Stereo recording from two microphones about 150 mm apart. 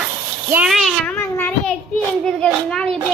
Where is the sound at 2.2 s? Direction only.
5° left (ahead or behind).